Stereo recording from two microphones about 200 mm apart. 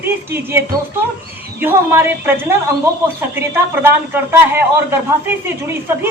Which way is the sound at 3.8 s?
10° right (ahead or behind).